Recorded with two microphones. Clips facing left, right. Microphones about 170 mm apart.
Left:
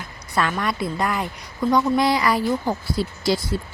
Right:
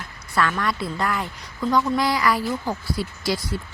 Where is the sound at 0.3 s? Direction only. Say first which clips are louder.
Even; 20° left (ahead or behind).